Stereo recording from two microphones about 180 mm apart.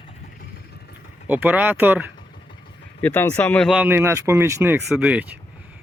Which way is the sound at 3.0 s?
10° left (ahead or behind).